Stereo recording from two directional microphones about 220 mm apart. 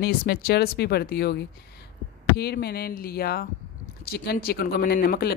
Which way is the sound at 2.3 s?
45° left (ahead or behind).